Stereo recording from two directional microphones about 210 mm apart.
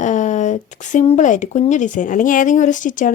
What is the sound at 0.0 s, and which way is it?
Speech, 35° left (ahead or behind).